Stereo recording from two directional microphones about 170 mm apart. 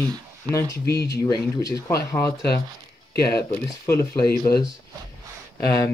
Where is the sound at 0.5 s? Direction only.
15° left (ahead or behind).